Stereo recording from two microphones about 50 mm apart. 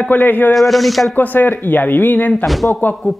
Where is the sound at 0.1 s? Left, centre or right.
Left.